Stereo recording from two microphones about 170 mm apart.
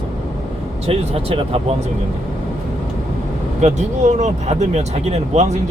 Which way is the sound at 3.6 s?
45° right (ahead or behind).